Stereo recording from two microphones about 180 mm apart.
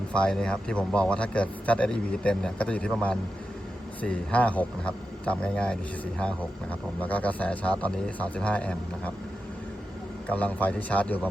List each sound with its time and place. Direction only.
0.1 s speech: 5° left (ahead or behind)
4.0 s speech: 5° left (ahead or behind)
10.2 s speech: 10° left (ahead or behind)